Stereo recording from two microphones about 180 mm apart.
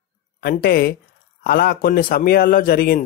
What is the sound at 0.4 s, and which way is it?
A man's voice, 55° left (ahead or behind).